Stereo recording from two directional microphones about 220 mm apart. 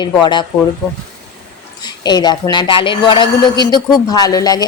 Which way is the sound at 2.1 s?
20° left (ahead or behind).